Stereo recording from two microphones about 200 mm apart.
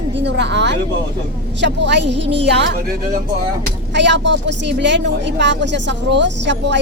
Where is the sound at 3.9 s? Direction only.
60° right (ahead or behind).